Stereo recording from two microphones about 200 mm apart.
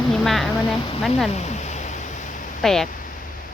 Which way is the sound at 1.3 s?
35° left (ahead or behind).